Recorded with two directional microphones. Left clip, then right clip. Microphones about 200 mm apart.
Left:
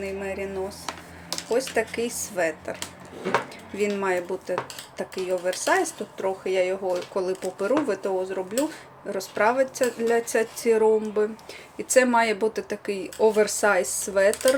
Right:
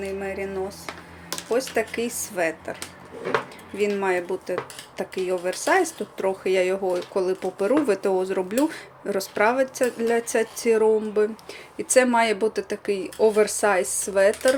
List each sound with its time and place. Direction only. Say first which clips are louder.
0.0 s speech: right 1 dB; 10° right (ahead or behind)
3.8 s speech: right 2 dB; 5° right (ahead or behind)